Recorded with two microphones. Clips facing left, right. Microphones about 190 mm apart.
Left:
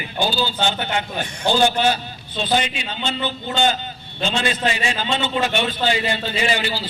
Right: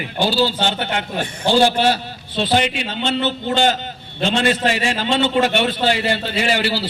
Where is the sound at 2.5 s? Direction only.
65° right (ahead or behind).